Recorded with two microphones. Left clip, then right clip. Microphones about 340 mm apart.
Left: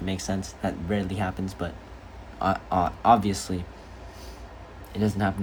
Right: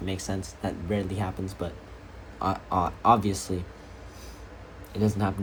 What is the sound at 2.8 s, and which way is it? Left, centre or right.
Speech, left.